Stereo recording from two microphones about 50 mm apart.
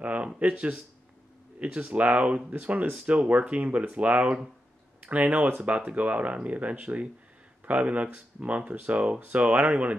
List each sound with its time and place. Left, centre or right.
0.0 s speech: right